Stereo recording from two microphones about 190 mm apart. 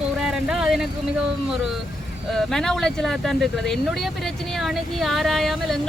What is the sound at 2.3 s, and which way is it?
Speech, centre (ahead or behind).